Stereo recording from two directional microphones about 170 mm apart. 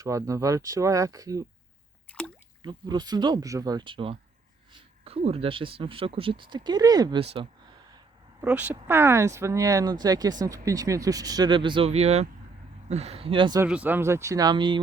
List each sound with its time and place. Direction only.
0.0 s speech: 20° right (ahead or behind)
2.1 s drip: 5° left (ahead or behind)
2.6 s speech: 25° right (ahead or behind)
8.4 s speech: 10° right (ahead or behind); by 13.6 s 30° right (ahead or behind)
13.7 s speech: 10° right (ahead or behind); by 14.8 s 25° right (ahead or behind)